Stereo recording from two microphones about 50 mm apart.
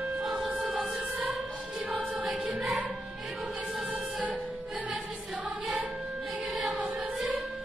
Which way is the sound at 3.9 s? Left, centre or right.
Right.